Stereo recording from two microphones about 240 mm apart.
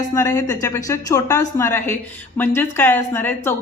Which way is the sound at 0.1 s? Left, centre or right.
Centre.